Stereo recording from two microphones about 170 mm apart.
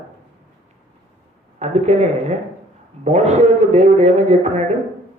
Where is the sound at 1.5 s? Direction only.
40° right (ahead or behind).